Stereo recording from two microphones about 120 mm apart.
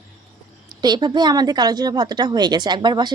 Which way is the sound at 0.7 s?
35° right (ahead or behind).